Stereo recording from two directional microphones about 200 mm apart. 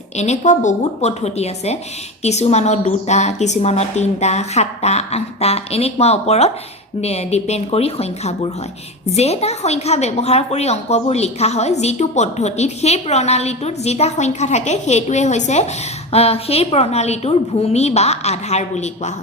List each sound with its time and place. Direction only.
0.2 s a woman's voice: 35° left (ahead or behind)